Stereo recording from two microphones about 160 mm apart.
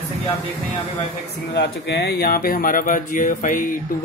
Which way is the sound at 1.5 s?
90° left.